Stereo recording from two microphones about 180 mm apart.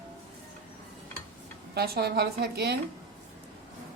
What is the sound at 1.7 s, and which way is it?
Speech, 60° right (ahead or behind).